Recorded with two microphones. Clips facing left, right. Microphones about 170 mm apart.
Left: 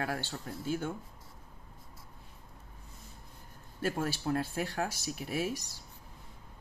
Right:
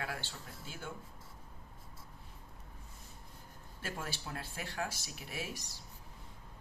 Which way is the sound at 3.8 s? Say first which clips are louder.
Left 10 dB; 45° left (ahead or behind).